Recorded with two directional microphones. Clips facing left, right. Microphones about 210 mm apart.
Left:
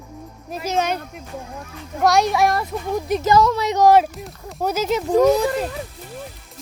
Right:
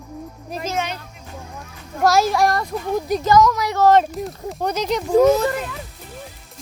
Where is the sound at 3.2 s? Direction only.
30° left (ahead or behind).